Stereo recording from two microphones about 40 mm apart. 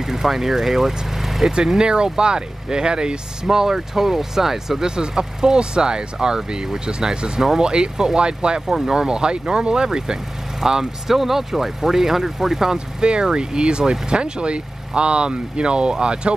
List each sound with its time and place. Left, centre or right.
0.0 s speech: centre
1.8 s speech: centre
8.6 s speech: centre
12.7 s speech: right